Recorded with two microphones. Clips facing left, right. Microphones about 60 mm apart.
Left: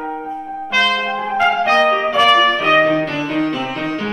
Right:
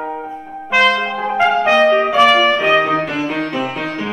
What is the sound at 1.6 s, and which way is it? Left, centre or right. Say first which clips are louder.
Trumpet: right 2 dB; right.